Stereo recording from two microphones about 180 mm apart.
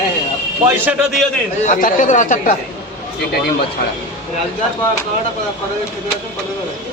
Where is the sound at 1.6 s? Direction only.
45° left (ahead or behind).